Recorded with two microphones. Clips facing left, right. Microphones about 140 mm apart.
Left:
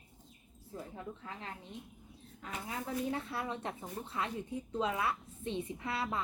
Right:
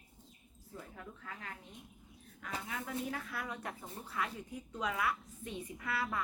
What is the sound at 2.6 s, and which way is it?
Speech, 25° left (ahead or behind).